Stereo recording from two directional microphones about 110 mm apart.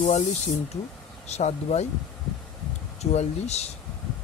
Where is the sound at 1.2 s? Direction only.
85° left.